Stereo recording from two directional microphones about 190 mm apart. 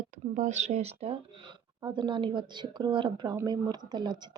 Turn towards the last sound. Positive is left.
turn(degrees=-25)  # may be behind; listen again after turning